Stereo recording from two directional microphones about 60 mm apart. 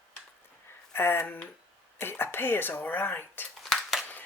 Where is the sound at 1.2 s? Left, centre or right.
Left.